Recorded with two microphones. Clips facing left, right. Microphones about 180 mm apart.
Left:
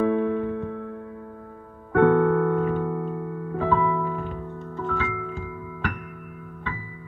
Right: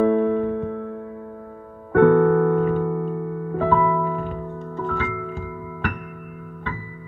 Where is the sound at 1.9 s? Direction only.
50° right (ahead or behind).